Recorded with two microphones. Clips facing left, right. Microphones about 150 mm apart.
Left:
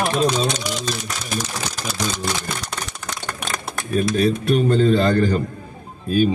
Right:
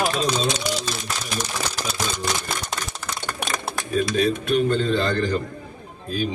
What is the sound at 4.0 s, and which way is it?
A man's voice, 45° left (ahead or behind).